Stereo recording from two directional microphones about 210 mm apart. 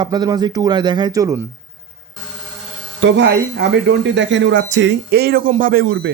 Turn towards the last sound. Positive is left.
turn(degrees=-55)  # may be behind; listen again after turning